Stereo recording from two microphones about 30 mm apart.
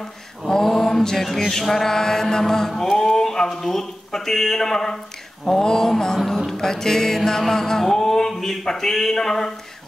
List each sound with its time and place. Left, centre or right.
0.6 s mantra: centre
1.0 s speech: centre
2.8 s music: centre
3.5 s speech: centre
5.5 s mantra: centre
6.1 s speech: centre
6.5 s mantra: centre
7.2 s speech: centre